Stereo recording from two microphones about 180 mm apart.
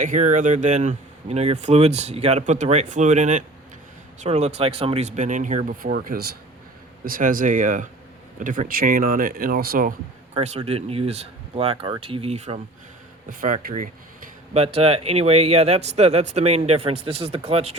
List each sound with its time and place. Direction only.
0.0 s speech: 45° right (ahead or behind)
10.3 s a man's voice: 35° right (ahead or behind)
13.4 s speech: 50° right (ahead or behind)
14.5 s speech: 35° right (ahead or behind)